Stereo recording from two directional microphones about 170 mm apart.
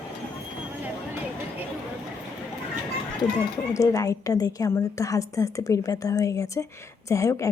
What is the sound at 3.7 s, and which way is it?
A woman's voice, 20° left (ahead or behind).